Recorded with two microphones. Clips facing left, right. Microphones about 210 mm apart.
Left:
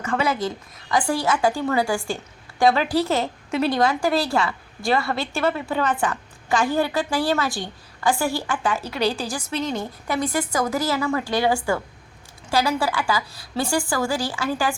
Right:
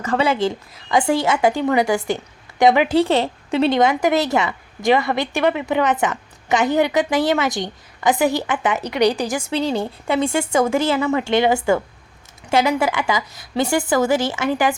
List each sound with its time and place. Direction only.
0.0 s a woman's voice: 35° right (ahead or behind)
3.0 s a woman's voice: 30° right (ahead or behind)
9.5 s a woman's voice: 30° right (ahead or behind)